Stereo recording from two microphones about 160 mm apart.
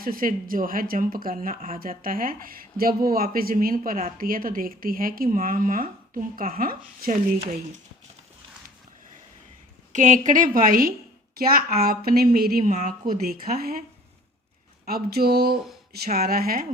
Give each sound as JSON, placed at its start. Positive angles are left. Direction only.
{"t": 0.0, "sound": "speech", "side_deg": -60}
{"t": 9.9, "sound": "a woman's voice", "side_deg": -55}
{"t": 14.8, "sound": "a woman's voice", "side_deg": -75}